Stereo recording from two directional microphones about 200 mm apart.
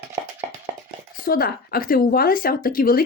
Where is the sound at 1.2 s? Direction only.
50° left (ahead or behind).